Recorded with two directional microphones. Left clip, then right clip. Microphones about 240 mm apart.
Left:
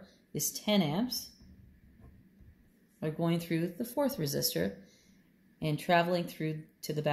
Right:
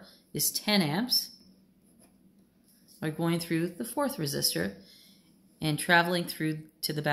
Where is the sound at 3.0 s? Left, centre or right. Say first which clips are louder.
Right 2 dB; centre.